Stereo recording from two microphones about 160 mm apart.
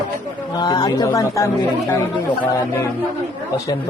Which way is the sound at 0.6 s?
25° left (ahead or behind).